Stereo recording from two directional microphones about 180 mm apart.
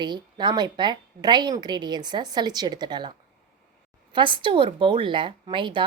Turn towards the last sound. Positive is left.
turn(degrees=-25)  # may be behind; listen again after turning